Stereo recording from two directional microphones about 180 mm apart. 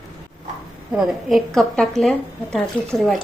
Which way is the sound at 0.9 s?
Centre (ahead or behind).